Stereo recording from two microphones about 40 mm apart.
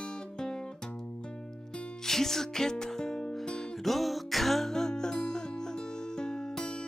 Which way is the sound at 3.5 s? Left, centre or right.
Centre.